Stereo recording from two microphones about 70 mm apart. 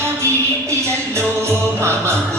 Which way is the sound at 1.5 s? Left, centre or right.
Right.